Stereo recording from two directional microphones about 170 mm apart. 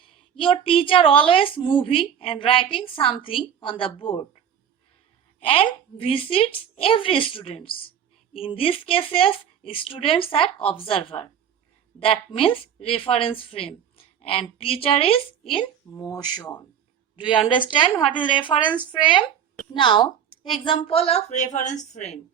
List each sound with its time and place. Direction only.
0.3 s a woman's voice: 30° left (ahead or behind)
5.4 s a woman's voice: 35° left (ahead or behind)
19.7 s a woman's voice: 30° left (ahead or behind)